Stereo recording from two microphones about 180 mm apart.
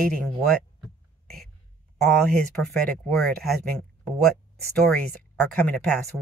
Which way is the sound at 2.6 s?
5° left (ahead or behind).